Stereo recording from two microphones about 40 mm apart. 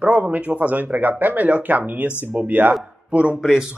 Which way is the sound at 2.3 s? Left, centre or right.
Right.